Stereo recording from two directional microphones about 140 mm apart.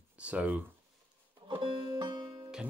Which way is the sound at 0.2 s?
10° right (ahead or behind).